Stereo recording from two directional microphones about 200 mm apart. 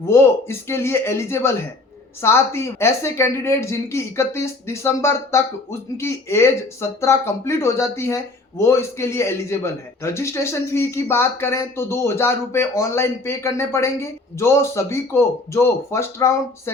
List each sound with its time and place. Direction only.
0.1 s speech: 10° left (ahead or behind)